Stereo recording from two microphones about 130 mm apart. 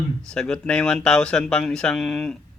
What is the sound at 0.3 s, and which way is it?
Speech, 5° left (ahead or behind).